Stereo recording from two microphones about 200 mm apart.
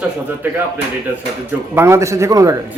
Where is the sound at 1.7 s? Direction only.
15° right (ahead or behind).